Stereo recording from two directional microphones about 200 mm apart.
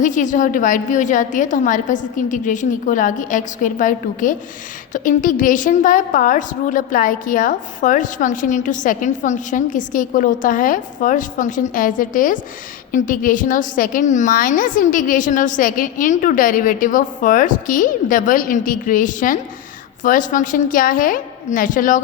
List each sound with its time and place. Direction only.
0.0 s a woman's voice: 40° left (ahead or behind)